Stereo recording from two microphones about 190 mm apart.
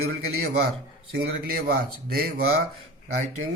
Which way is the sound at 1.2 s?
55° right (ahead or behind).